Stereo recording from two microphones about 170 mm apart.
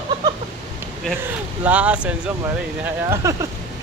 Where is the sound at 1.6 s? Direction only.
10° right (ahead or behind).